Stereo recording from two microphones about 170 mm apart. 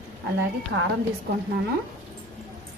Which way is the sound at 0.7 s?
90° right.